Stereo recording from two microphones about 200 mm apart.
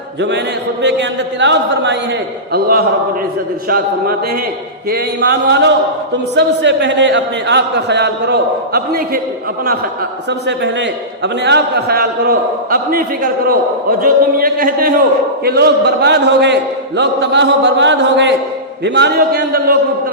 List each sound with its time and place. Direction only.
0.8 s a man's voice: 60° right (ahead or behind)
2.5 s a man's voice: 50° right (ahead or behind)
10.2 s a man's voice: 60° right (ahead or behind)